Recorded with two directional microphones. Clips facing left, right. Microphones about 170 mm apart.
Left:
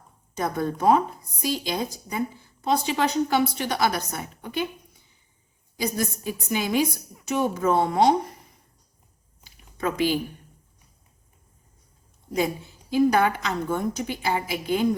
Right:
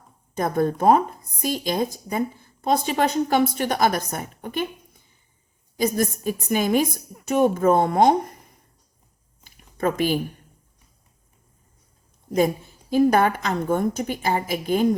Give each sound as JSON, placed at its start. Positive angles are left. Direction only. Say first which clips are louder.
{"t": 0.3, "sound": "speech", "louder": "right 4 dB", "side_deg": -50}
{"t": 5.7, "sound": "speech", "louder": "right 5 dB", "side_deg": -45}
{"t": 9.4, "sound": "a sound", "louder": "right 4 dB", "side_deg": -50}
{"t": 12.3, "sound": "speech", "louder": "right 5 dB", "side_deg": -45}